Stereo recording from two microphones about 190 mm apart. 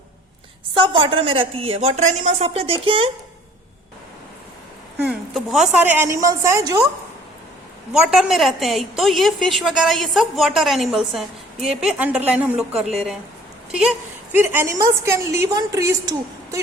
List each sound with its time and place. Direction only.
0.7 s a woman's voice: 25° right (ahead or behind)
4.9 s a woman's voice: 5° right (ahead or behind)
7.9 s a woman's voice: centre (ahead or behind); by 16.6 s 15° right (ahead or behind)